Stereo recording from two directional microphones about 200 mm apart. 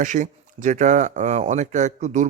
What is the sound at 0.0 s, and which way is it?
Speech, 40° right (ahead or behind).